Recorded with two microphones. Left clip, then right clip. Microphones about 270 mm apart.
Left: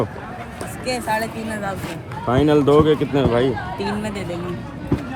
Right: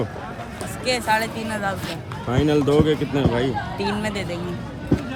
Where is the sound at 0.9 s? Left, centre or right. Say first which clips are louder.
Right 2 dB; right.